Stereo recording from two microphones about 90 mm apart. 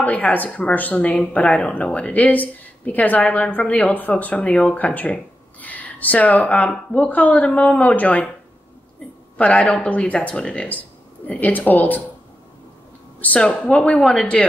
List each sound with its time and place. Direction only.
0.0 s speech: 15° left (ahead or behind)
9.4 s a woman's voice: 10° left (ahead or behind)
13.2 s speech: 15° left (ahead or behind)